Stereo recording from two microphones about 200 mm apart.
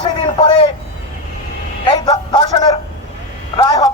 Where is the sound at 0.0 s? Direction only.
25° left (ahead or behind).